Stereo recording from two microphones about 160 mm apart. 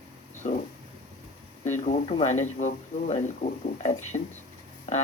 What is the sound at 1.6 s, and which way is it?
Speech, 45° left (ahead or behind).